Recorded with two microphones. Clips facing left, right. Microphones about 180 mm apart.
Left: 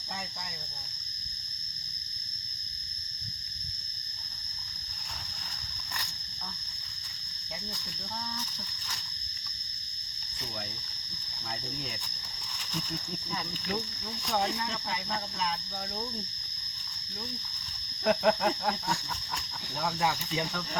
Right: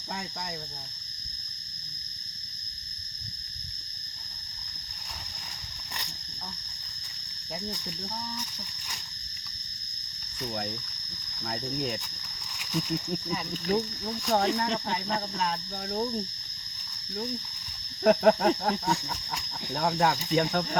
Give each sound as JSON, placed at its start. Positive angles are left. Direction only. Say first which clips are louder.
{"t": 14.4, "sound": "speech", "louder": "right 6 dB", "side_deg": -65}
{"t": 18.0, "sound": "cricket", "louder": "right 5 dB", "side_deg": -45}
{"t": 19.8, "sound": "speech", "louder": "right 5 dB", "side_deg": -55}